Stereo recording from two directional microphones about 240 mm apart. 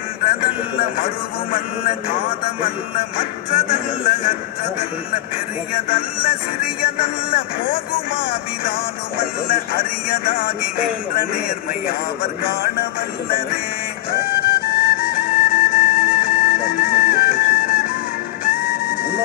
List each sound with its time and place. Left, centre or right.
0.2 s a man's voice: left
3.2 s music: left
5.9 s music: left
9.2 s music: left
14.4 s music: left